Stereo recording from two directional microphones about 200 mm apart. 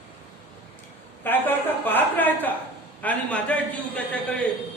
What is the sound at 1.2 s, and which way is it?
A woman's voice, 10° left (ahead or behind).